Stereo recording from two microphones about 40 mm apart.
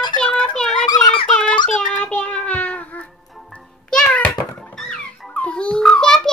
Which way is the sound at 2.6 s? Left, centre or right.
Left.